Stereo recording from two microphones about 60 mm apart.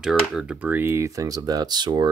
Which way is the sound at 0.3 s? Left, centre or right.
Centre.